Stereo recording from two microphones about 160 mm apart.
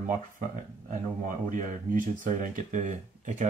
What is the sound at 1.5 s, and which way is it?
Speech, 55° right (ahead or behind).